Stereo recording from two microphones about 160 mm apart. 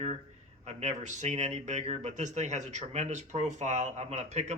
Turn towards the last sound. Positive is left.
turn(degrees=-45)  # may be behind; listen again after turning